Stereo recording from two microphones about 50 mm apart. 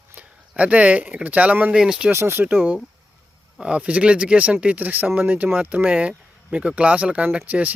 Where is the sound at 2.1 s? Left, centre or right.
Right.